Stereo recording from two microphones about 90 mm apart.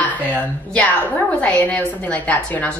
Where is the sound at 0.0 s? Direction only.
20° left (ahead or behind).